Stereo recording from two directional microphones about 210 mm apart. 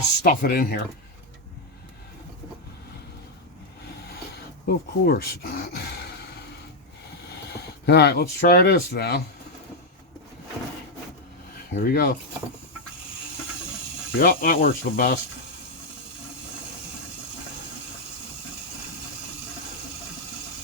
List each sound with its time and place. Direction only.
0.2 s speech: 45° left (ahead or behind)
4.6 s speech: 45° left (ahead or behind)
7.9 s speech: 50° left (ahead or behind)
11.7 s speech: 45° left (ahead or behind)
14.2 s speech: 45° left (ahead or behind)